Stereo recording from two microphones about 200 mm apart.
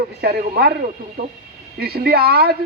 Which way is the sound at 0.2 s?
50° right (ahead or behind).